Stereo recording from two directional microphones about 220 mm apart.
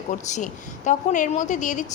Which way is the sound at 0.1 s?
35° left (ahead or behind).